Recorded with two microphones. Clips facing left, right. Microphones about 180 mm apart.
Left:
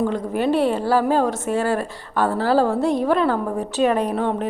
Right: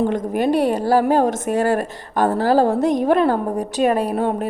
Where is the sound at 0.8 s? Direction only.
45° right (ahead or behind).